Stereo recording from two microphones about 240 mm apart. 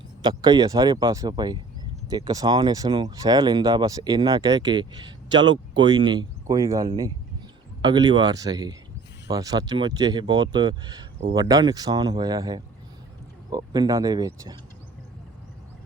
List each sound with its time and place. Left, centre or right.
0.2 s speech: centre